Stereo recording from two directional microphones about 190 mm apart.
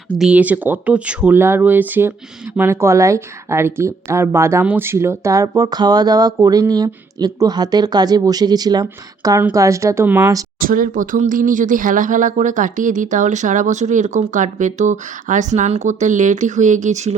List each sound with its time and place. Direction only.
0.2 s speech: 5° right (ahead or behind)
10.6 s speech: 45° right (ahead or behind)